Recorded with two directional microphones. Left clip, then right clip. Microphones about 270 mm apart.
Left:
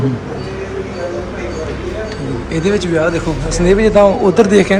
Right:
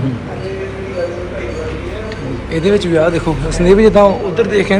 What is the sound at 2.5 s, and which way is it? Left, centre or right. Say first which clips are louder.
Speech: right 3 dB; centre.